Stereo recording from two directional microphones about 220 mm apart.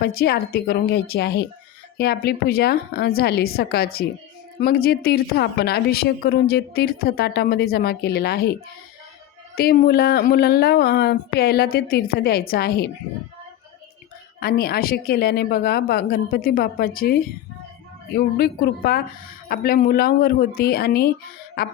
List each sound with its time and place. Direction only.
0.0 s a woman's voice: 45° left (ahead or behind)
9.6 s a woman's voice: 45° left (ahead or behind)
14.4 s a woman's voice: 45° left (ahead or behind)